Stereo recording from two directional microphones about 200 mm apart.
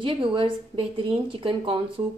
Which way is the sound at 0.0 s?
25° right (ahead or behind).